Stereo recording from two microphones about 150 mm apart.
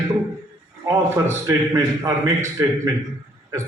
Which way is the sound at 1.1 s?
20° right (ahead or behind).